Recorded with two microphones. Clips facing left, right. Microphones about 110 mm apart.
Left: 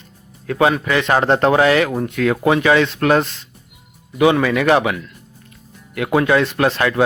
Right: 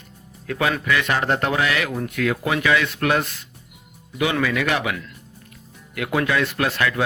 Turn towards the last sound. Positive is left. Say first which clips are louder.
# left 5 dB
turn(degrees=30)  # may be behind; listen again after turning